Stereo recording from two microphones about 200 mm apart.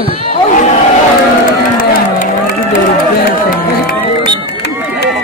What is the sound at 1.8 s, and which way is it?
Crowd, 40° left (ahead or behind).